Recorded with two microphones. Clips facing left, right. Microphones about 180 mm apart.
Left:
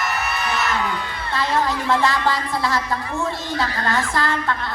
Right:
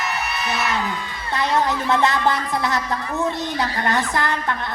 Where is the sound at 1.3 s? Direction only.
20° right (ahead or behind).